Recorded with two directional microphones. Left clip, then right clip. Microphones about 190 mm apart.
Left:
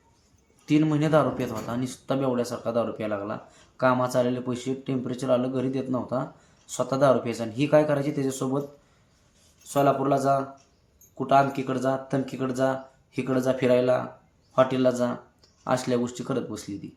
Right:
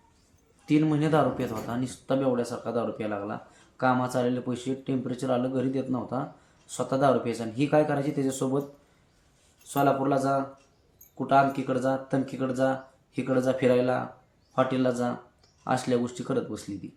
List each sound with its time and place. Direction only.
0.6 s speech: 20° left (ahead or behind)
9.7 s speech: 25° left (ahead or behind)